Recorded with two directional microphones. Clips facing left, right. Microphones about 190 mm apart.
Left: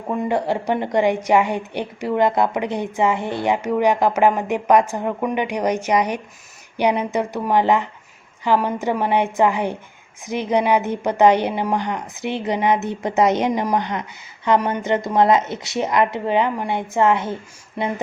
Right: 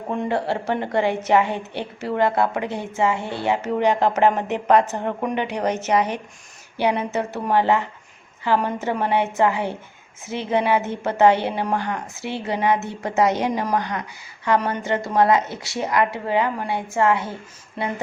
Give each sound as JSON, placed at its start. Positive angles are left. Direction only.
{"t": 0.3, "sound": "a woman's voice", "side_deg": 15}